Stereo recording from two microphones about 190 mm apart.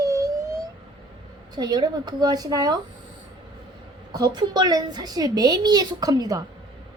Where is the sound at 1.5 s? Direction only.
20° right (ahead or behind).